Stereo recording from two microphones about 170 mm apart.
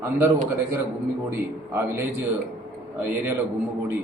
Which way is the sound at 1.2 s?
15° right (ahead or behind).